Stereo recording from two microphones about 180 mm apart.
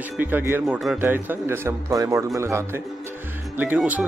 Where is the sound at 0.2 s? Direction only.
10° right (ahead or behind).